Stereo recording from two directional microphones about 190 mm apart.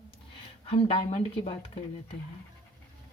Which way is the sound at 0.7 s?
30° left (ahead or behind).